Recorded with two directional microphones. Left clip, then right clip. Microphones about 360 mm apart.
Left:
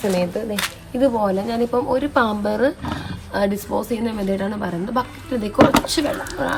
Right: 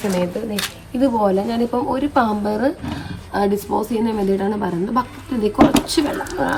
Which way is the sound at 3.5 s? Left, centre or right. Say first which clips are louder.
Right 3 dB; centre.